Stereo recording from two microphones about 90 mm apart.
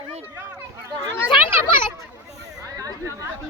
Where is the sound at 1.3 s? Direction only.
65° left (ahead or behind).